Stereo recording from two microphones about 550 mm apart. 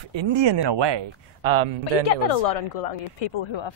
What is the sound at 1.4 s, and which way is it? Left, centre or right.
Speech, right.